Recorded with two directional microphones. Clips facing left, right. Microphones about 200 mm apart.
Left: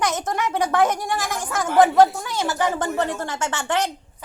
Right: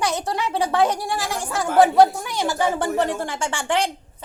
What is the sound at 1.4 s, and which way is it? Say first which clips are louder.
A woman's voice: even; 15° right (ahead or behind).